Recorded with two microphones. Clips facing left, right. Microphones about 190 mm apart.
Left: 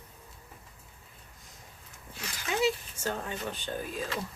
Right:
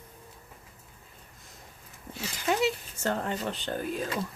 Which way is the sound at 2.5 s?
60° right (ahead or behind).